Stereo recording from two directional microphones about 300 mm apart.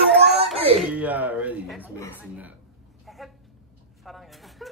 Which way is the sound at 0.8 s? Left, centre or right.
Centre.